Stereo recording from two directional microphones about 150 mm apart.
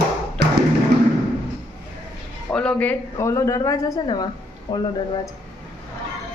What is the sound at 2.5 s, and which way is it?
A woman's voice, 5° left (ahead or behind).